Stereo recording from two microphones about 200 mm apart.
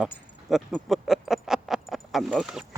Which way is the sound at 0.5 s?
Centre (ahead or behind).